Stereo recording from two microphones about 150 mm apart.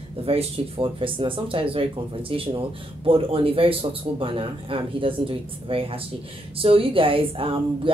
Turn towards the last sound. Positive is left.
turn(degrees=-35)  # may be behind; listen again after turning